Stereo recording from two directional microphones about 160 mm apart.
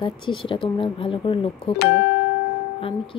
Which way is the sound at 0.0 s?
30° left (ahead or behind).